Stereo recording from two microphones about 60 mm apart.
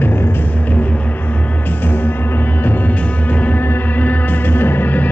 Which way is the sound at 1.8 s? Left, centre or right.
Left.